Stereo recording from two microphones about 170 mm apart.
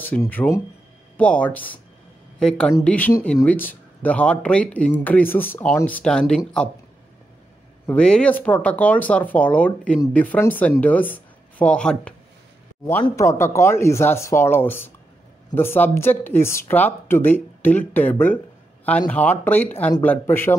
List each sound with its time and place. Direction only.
0.0 s a woman's voice: 10° left (ahead or behind)
7.8 s speech: 5° left (ahead or behind)
13.0 s speech: 15° left (ahead or behind)